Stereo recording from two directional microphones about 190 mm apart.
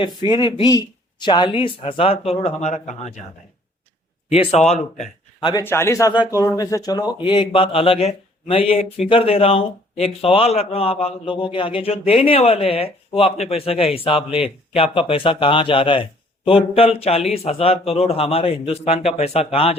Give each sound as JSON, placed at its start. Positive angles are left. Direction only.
{"t": 0.3, "sound": "speech", "side_deg": 25}
{"t": 4.3, "sound": "speech", "side_deg": 35}
{"t": 5.6, "sound": "speech", "side_deg": 15}